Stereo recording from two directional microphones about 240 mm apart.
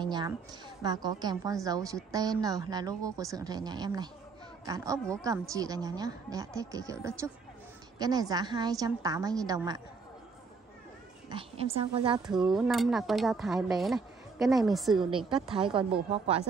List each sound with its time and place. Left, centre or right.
0.0 s a woman's voice: centre
11.2 s a woman's voice: right
12.3 s speech: centre
15.0 s a woman's voice: right